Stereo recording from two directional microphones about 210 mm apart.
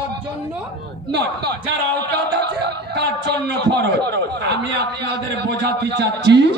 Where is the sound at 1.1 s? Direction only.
50° right (ahead or behind).